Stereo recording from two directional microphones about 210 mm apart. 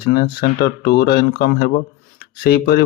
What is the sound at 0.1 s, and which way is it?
Speech, 50° left (ahead or behind).